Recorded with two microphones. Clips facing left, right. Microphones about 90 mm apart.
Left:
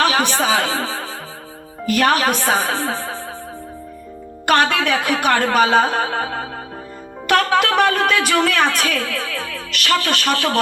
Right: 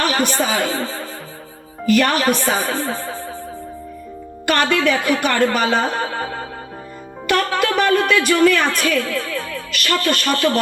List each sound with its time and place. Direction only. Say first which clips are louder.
0.1 s speech: left 1 dB; 90° left
2.2 s a woman's voice: even; 65° left (ahead or behind)
4.4 s a woman's voice: left 1 dB; 60° left (ahead or behind)